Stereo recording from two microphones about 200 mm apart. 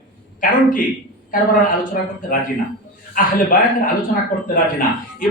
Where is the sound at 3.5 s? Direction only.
40° left (ahead or behind).